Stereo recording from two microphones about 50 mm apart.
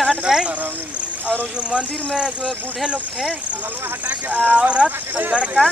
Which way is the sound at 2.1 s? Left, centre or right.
Centre.